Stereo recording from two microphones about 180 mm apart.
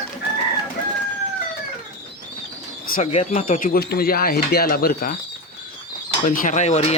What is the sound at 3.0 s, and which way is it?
Speech, 40° left (ahead or behind).